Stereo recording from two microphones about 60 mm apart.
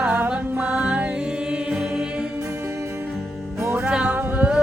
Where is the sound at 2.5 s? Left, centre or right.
Right.